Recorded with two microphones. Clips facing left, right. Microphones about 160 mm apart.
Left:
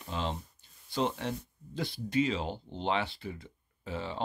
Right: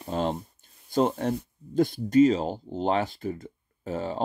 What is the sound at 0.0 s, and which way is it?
Speech, 45° right (ahead or behind).